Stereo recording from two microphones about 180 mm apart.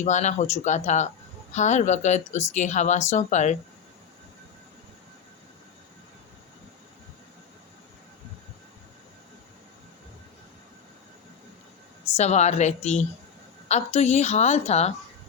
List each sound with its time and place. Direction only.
0.0 s a woman's voice: 40° left (ahead or behind)
12.1 s a woman's voice: 40° left (ahead or behind)